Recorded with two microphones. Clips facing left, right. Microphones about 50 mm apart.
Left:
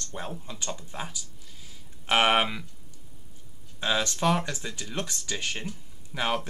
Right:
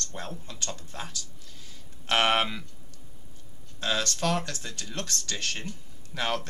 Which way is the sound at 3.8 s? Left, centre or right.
Centre.